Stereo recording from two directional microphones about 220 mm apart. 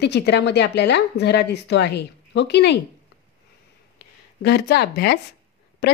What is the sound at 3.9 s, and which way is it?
A woman's voice, 50° left (ahead or behind).